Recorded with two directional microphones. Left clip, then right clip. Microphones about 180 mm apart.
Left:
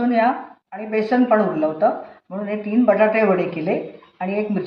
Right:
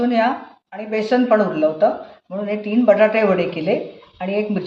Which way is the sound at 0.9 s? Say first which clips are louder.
Right 1 dB; 15° right (ahead or behind).